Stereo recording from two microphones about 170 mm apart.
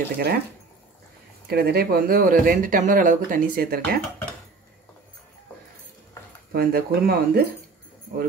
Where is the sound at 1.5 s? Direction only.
65° right (ahead or behind).